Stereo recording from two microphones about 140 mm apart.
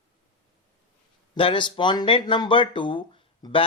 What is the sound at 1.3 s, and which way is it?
Speech, 35° left (ahead or behind).